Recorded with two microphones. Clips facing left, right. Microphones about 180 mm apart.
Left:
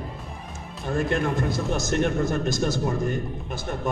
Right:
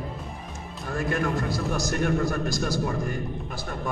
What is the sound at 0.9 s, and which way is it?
A man's voice, 25° left (ahead or behind).